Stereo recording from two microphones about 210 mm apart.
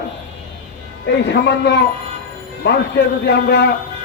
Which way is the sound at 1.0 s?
55° left (ahead or behind).